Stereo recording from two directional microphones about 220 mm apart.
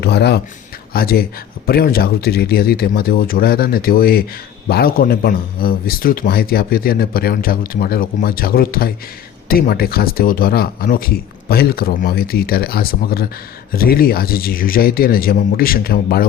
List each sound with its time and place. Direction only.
0.0 s a man's voice: 50° left (ahead or behind)